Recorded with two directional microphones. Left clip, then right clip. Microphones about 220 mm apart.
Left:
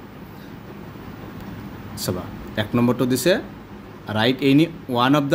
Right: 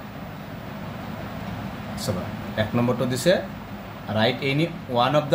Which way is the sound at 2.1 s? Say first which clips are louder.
Left 1 dB; 45° left (ahead or behind).